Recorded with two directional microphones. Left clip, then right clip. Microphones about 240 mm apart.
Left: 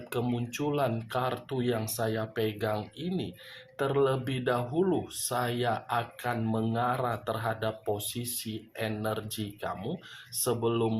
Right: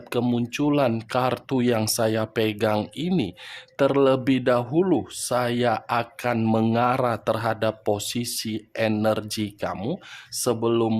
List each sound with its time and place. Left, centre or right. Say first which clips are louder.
0.1 s speech: right 8 dB; right